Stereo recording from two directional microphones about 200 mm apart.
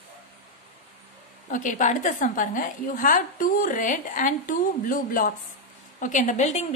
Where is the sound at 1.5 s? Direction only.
40° left (ahead or behind).